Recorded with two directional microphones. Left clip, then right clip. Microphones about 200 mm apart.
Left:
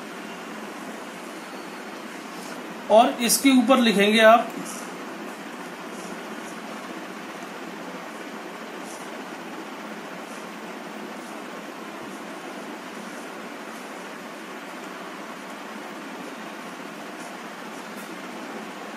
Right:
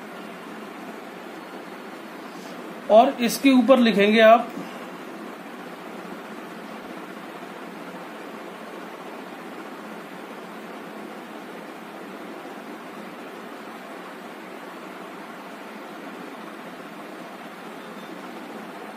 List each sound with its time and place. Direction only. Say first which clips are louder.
2.9 s speech: right 1 dB; 35° right (ahead or behind)